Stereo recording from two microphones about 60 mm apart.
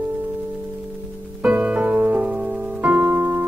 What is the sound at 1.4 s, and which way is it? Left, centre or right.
Music, right.